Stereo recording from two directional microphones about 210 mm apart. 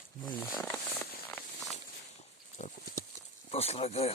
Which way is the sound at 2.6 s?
35° left (ahead or behind).